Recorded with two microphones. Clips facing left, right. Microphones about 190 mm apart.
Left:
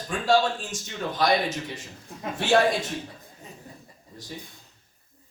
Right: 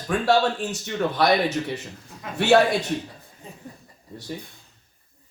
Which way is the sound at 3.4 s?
30° right (ahead or behind).